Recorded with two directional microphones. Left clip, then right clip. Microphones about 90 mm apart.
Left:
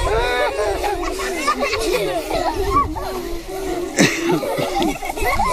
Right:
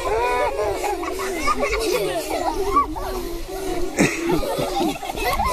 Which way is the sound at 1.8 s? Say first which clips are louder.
Left 2 dB; 25° left (ahead or behind).